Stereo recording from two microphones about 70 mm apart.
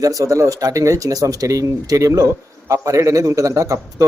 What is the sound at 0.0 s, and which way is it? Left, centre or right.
A man's voice, right.